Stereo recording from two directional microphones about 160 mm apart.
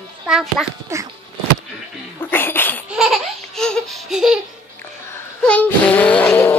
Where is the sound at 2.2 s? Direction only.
10° left (ahead or behind).